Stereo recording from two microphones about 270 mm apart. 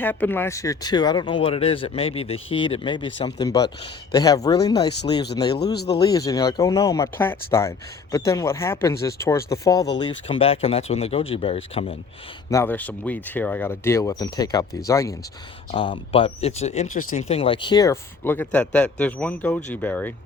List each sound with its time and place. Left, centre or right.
0.0 s speech: centre
5.7 s speech: left
6.0 s speech: centre
12.5 s speech: centre